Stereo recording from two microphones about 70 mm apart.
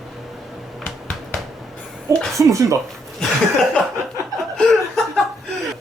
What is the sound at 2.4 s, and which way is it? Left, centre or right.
Speech, right.